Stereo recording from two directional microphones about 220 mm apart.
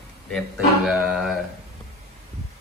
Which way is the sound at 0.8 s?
5° right (ahead or behind).